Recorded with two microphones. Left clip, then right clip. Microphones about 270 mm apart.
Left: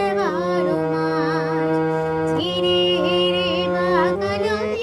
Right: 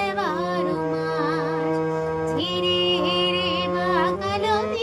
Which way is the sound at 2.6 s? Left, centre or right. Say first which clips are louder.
Left 3 dB; centre.